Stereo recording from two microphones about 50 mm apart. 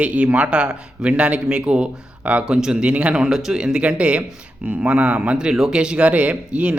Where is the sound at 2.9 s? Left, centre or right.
Right.